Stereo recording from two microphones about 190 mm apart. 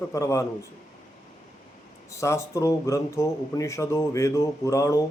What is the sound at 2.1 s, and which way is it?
Speech, 15° left (ahead or behind).